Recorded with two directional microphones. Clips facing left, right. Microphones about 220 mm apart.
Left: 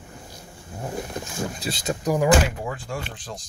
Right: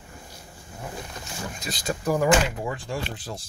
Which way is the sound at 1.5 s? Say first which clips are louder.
Left 3 dB; 30° left (ahead or behind).